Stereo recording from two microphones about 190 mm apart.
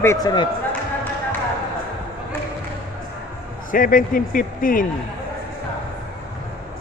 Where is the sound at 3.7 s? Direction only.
45° left (ahead or behind).